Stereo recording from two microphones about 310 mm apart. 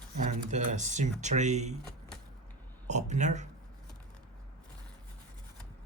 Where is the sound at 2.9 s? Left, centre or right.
Right.